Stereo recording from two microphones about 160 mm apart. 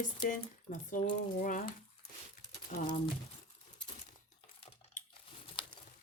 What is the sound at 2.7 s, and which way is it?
Speech, 50° left (ahead or behind).